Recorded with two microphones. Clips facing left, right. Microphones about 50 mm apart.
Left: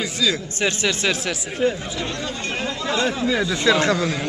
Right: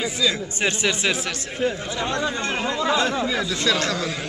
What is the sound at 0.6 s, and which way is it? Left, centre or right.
Speech, right.